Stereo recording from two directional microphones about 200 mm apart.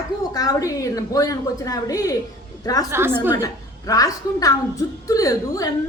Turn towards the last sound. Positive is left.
turn(degrees=15)  # may be behind; listen again after turning